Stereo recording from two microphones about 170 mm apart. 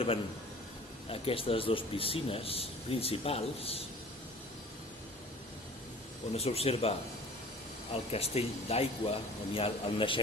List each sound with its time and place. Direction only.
1.1 s speech: 35° left (ahead or behind)
6.3 s speech: 35° left (ahead or behind)
7.9 s speech: 35° left (ahead or behind)